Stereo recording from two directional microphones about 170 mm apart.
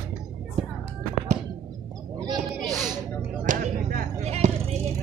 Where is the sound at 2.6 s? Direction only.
Centre (ahead or behind).